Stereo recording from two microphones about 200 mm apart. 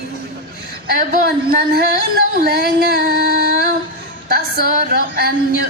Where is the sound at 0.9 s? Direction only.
50° right (ahead or behind).